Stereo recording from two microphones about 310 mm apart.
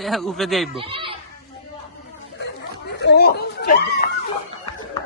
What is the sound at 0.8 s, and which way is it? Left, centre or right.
Speech, centre.